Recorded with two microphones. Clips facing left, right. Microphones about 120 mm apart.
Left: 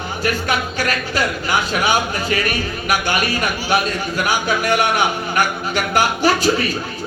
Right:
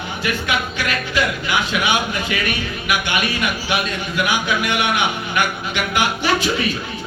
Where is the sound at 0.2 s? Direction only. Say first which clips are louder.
Left 2 dB; 40° left (ahead or behind).